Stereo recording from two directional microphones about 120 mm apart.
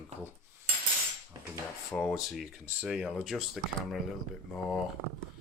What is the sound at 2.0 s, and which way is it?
Speech, centre (ahead or behind).